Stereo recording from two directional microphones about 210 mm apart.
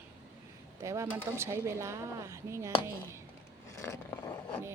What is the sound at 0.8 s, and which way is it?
Speech, 15° right (ahead or behind).